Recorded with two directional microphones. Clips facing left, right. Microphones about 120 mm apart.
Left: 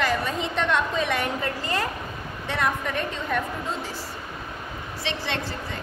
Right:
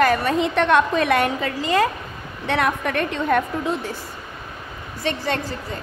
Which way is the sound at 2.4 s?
70° right (ahead or behind).